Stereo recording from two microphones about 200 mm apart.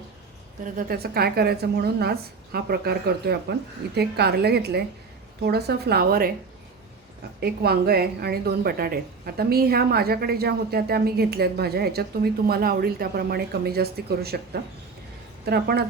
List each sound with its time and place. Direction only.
0.6 s a woman's voice: 45° right (ahead or behind)
7.3 s a woman's voice: 50° right (ahead or behind)